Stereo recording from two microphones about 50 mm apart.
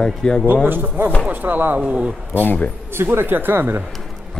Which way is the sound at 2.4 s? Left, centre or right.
Left.